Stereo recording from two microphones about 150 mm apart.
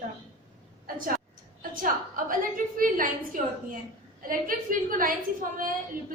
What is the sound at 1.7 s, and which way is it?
A woman's voice, 65° right (ahead or behind).